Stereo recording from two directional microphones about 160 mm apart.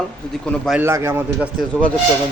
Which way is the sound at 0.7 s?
15° right (ahead or behind).